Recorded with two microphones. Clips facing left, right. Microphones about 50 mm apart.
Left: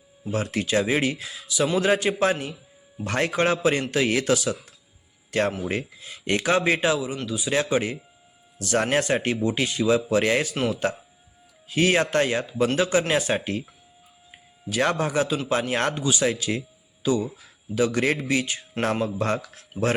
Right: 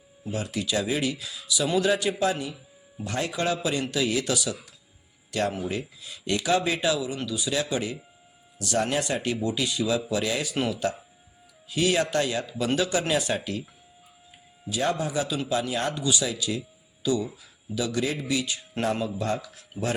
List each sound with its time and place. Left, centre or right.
0.3 s a man's voice: left
7.5 s a man's voice: left
14.7 s a man's voice: left
16.0 s a man's voice: left
16.2 s a man's voice: left
16.6 s music: left
17.7 s a man's voice: left
18.2 s a man's voice: left